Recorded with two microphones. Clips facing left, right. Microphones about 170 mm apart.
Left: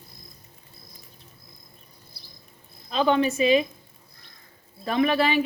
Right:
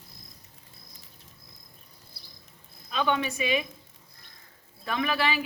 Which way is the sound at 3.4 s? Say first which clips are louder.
Left 8 dB; 30° left (ahead or behind).